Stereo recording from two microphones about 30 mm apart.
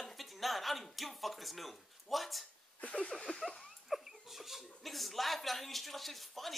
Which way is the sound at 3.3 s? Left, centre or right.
Left.